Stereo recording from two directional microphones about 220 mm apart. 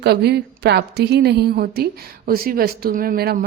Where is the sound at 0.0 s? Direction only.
45° right (ahead or behind).